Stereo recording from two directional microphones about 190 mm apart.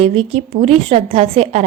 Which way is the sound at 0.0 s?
30° right (ahead or behind).